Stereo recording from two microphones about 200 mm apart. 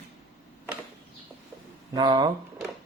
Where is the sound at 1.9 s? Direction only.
20° right (ahead or behind).